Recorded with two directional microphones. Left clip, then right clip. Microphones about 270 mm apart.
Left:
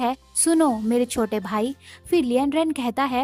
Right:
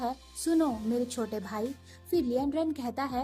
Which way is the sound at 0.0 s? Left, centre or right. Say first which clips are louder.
Left 10 dB; left.